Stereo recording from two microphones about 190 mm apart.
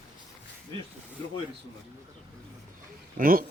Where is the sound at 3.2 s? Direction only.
50° right (ahead or behind).